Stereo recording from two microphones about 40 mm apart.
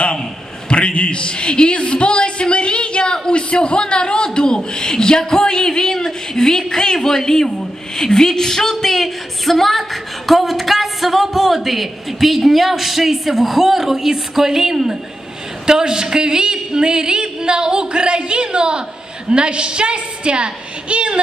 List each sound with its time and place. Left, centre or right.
0.7 s a man's voice: left; by 21.2 s right